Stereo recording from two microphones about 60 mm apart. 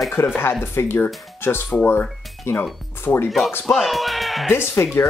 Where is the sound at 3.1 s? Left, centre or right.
Left.